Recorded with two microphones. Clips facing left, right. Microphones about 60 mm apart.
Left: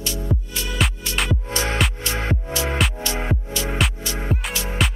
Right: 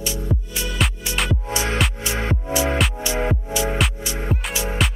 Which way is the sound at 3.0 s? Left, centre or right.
Centre.